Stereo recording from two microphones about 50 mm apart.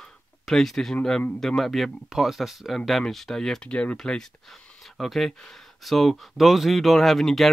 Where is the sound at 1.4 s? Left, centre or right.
Centre.